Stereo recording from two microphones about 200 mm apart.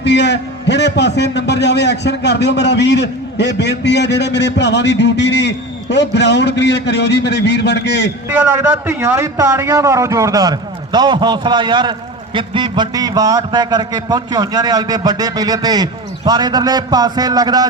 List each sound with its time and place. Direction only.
0.0 s a man's voice: 60° left (ahead or behind)
8.3 s a man's voice: 10° right (ahead or behind)